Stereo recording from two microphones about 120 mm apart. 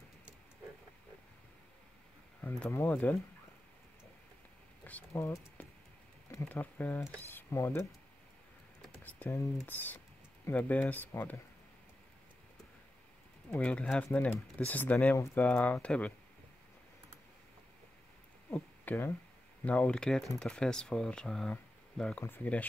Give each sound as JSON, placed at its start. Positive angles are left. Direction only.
{"t": 2.4, "sound": "speech", "side_deg": 15}
{"t": 5.1, "sound": "speech", "side_deg": 25}
{"t": 9.0, "sound": "typing", "side_deg": 15}
{"t": 9.7, "sound": "speech", "side_deg": 15}
{"t": 13.5, "sound": "speech", "side_deg": 10}
{"t": 18.5, "sound": "a sound", "side_deg": 15}
{"t": 19.6, "sound": "speech", "side_deg": 15}